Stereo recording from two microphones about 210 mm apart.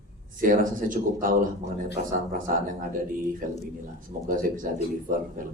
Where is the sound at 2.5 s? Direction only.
40° right (ahead or behind).